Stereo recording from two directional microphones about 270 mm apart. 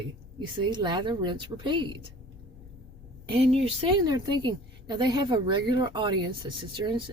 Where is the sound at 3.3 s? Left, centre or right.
Right.